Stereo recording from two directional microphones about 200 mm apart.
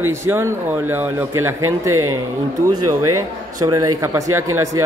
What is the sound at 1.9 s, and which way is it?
Speech, 90° right.